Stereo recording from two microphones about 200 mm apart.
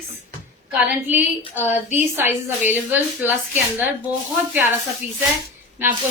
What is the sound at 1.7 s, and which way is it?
Speech, 10° right (ahead or behind).